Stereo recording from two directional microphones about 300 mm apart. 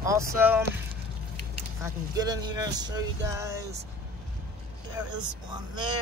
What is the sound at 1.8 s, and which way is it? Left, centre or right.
Speech, centre.